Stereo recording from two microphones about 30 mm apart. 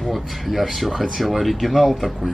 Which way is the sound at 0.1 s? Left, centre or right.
Centre.